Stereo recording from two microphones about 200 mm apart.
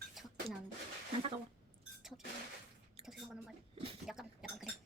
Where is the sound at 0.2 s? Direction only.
Centre (ahead or behind).